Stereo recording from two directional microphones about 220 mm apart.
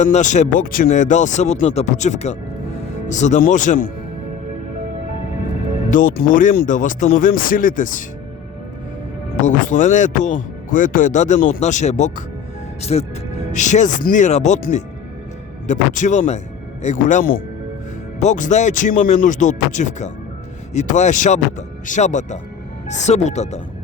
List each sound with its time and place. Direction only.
0.0 s speech: 35° left (ahead or behind)
5.9 s speech: 40° left (ahead or behind)
9.3 s speech: 35° left (ahead or behind)